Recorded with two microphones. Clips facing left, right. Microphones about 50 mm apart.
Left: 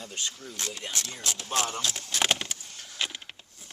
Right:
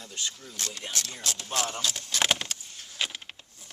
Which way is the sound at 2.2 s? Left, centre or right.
Centre.